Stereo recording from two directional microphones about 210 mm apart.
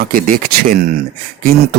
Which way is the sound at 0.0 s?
40° right (ahead or behind).